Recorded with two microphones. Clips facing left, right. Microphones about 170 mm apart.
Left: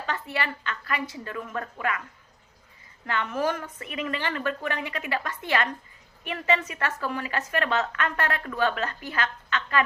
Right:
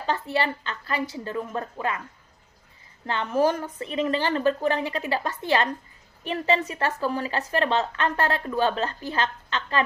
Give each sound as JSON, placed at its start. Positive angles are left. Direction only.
{"t": 0.0, "sound": "a woman's voice", "side_deg": -30}
{"t": 3.1, "sound": "a woman's voice", "side_deg": -30}